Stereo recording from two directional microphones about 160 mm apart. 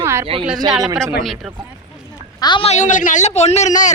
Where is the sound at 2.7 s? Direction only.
50° left (ahead or behind).